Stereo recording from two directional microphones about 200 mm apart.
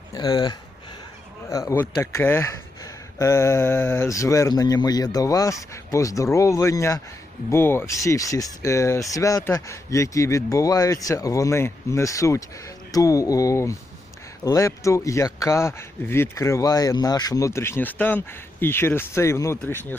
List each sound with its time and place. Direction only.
0.1 s speech: 20° left (ahead or behind)